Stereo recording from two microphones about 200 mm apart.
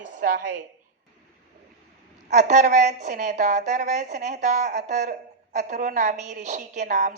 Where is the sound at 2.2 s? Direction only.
35° right (ahead or behind).